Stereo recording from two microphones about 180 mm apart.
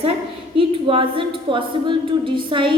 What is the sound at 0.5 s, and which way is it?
A woman's voice, 30° right (ahead or behind).